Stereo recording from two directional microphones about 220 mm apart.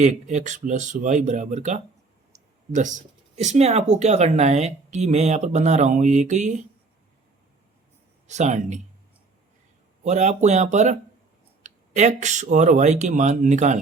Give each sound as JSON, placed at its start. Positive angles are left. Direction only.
{"t": 0.0, "sound": "speech", "side_deg": -35}
{"t": 8.3, "sound": "speech", "side_deg": -30}
{"t": 10.0, "sound": "speech", "side_deg": -30}